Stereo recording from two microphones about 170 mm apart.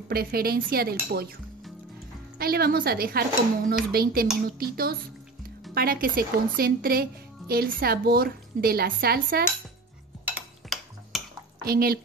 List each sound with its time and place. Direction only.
0.1 s a woman's voice: 60° right (ahead or behind)
2.3 s a woman's voice: 65° right (ahead or behind)
10.2 s cutlery: 5° right (ahead or behind)
11.6 s a woman's voice: 60° right (ahead or behind)